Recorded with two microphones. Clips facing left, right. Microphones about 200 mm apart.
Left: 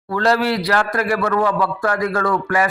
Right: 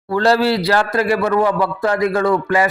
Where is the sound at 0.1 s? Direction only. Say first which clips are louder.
Right 3 dB; 30° right (ahead or behind).